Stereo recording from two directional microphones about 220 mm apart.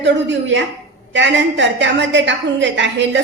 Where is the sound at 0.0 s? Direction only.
55° right (ahead or behind).